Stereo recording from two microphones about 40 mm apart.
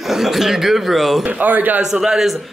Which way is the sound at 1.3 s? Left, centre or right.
Right.